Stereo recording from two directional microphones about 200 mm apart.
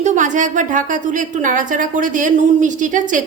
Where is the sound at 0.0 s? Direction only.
35° right (ahead or behind).